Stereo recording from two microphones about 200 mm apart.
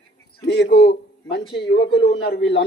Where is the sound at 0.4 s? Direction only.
60° left (ahead or behind).